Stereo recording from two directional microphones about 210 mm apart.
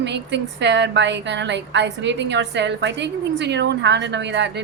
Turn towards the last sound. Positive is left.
turn(degrees=-55)  # may be behind; listen again after turning